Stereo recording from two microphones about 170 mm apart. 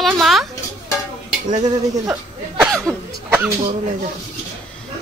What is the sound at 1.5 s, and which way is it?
Speech, 25° right (ahead or behind).